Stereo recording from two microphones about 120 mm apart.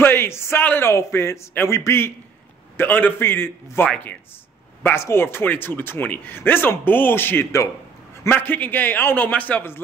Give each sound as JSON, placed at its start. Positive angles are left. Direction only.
{"t": 0.0, "sound": "a man's voice", "side_deg": 20}